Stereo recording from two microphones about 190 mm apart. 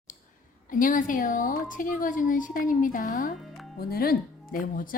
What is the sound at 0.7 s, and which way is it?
Speech, 45° left (ahead or behind).